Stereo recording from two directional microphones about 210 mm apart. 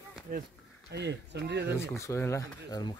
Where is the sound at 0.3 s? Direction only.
40° right (ahead or behind).